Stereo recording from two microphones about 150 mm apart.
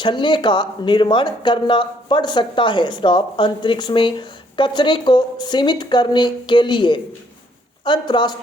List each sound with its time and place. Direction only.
0.0 s speech: 30° left (ahead or behind)